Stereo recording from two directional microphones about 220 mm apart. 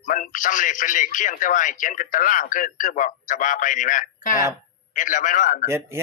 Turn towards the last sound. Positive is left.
turn(degrees=-10)  # may be behind; listen again after turning